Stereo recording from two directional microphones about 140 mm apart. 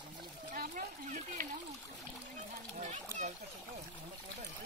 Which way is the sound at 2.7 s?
60° right (ahead or behind).